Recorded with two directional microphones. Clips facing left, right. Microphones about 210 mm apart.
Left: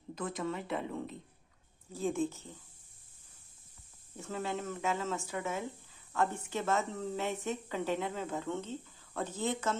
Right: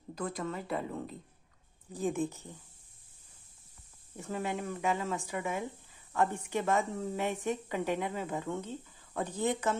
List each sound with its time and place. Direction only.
0.1 s a woman's voice: centre (ahead or behind)
1.9 s speech: 15° right (ahead or behind)
4.2 s speech: 15° right (ahead or behind)